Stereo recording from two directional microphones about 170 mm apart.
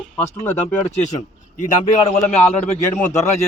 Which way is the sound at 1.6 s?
40° left (ahead or behind).